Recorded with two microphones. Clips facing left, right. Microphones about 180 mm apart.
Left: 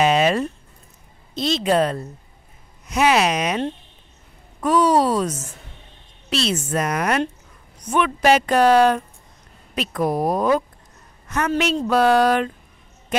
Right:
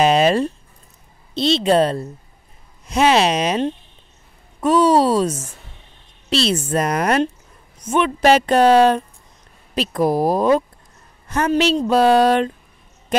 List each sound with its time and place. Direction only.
0.0 s a woman's voice: 35° right (ahead or behind)